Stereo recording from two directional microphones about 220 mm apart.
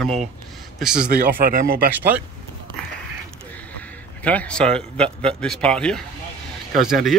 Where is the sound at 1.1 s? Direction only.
40° right (ahead or behind).